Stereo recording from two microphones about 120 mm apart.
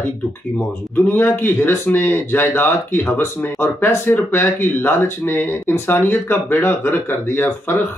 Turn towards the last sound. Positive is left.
turn(degrees=20)  # may be behind; listen again after turning